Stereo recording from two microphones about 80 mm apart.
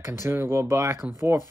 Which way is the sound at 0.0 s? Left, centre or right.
Right.